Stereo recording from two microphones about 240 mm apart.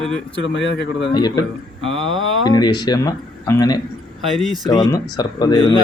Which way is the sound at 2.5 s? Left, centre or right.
Centre.